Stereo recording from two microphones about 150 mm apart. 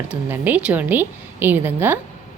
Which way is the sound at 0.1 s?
10° right (ahead or behind).